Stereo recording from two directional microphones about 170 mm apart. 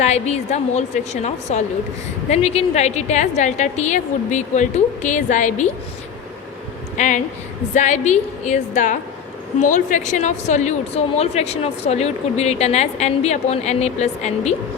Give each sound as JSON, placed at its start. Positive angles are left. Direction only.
{"t": 0.0, "sound": "a woman's voice", "side_deg": 40}
{"t": 6.9, "sound": "a woman's voice", "side_deg": 45}